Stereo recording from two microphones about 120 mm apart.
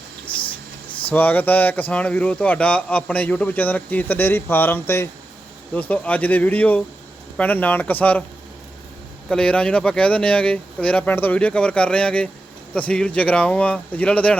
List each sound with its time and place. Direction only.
0.3 s a sound: 45° left (ahead or behind)
1.1 s speech: 15° left (ahead or behind)
9.3 s speech: 10° left (ahead or behind)